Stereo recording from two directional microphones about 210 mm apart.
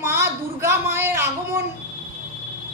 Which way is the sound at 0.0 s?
15° right (ahead or behind).